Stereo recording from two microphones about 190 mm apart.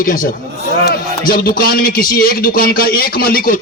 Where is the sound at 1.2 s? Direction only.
50° left (ahead or behind).